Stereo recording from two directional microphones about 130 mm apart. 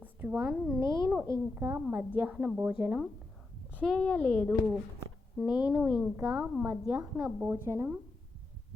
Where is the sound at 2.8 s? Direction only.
20° right (ahead or behind).